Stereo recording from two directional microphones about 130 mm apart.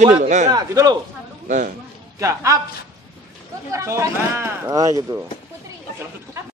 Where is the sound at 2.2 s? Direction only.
25° right (ahead or behind).